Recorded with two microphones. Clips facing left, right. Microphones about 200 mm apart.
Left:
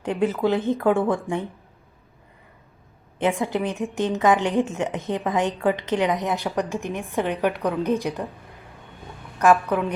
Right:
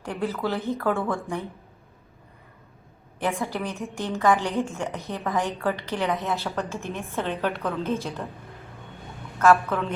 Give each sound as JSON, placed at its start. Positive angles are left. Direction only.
{"t": 0.0, "sound": "a woman's voice", "side_deg": 20}
{"t": 3.4, "sound": "a woman's voice", "side_deg": 20}
{"t": 9.4, "sound": "a woman's voice", "side_deg": 15}